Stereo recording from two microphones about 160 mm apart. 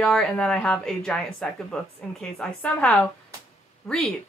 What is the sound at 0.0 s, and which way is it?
A woman's voice, 5° left (ahead or behind).